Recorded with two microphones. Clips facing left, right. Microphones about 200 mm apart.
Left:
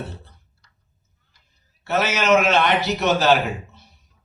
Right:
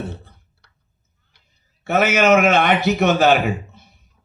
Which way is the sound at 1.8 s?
55° right (ahead or behind).